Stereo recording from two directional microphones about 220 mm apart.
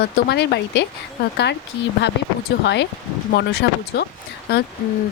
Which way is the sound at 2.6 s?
50° left (ahead or behind).